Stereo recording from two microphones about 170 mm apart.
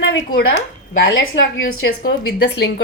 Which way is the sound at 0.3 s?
70° left (ahead or behind).